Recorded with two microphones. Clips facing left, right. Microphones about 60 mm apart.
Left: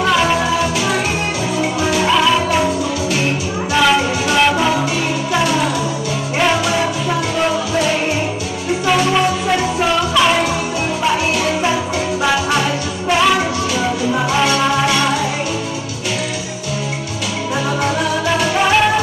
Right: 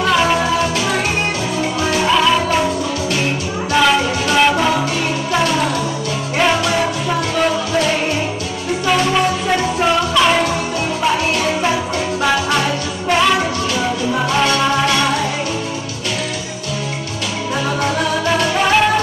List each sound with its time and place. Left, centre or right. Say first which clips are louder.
0.0 s music: even; centre
2.0 s music: right 1 dB; centre
3.7 s music: even; centre
6.8 s music: even; centre
9.1 s music: left 1 dB; centre
11.6 s music: even; centre
14.9 s music: even; centre
17.8 s music: right 1 dB; centre